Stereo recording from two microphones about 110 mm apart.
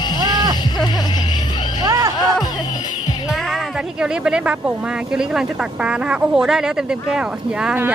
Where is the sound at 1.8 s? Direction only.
30° right (ahead or behind).